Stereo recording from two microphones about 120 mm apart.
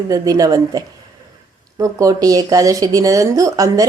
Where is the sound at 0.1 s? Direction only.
30° right (ahead or behind).